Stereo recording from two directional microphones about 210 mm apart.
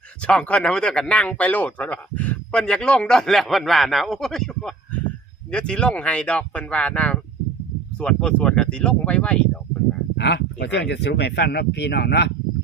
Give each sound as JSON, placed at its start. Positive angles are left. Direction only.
{"t": 0.2, "sound": "speech", "side_deg": 5}
{"t": 10.2, "sound": "speech", "side_deg": 55}